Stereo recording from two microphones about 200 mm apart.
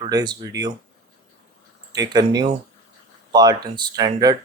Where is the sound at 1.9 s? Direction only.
20° right (ahead or behind).